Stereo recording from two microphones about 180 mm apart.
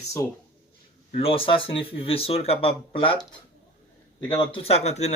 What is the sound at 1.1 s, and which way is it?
Speech, 30° left (ahead or behind).